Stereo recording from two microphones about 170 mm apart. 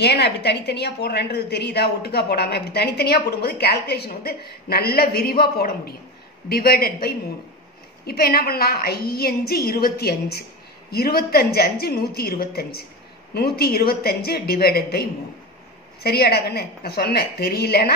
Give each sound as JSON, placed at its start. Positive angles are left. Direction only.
{"t": 0.0, "sound": "a woman's voice", "side_deg": 75}